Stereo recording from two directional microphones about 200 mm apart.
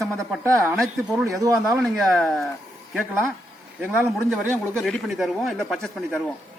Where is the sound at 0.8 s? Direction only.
Centre (ahead or behind).